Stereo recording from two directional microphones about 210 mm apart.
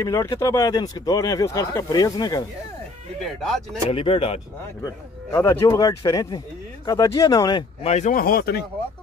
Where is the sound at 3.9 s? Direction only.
25° left (ahead or behind).